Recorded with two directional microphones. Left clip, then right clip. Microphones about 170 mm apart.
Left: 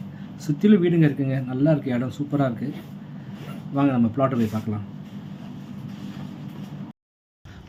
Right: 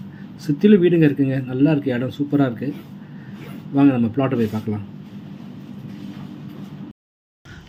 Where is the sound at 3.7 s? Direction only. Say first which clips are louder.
Right 5 dB; 15° right (ahead or behind).